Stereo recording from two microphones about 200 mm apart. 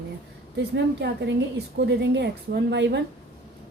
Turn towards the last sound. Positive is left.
turn(degrees=-60)  # may be behind; listen again after turning